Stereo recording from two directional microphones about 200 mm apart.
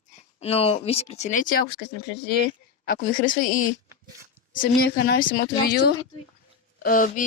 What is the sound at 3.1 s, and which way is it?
A woman's voice, 40° left (ahead or behind).